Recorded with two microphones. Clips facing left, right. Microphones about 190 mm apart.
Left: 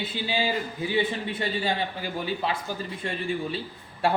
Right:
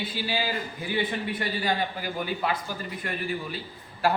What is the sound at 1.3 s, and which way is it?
Speech, 25° left (ahead or behind).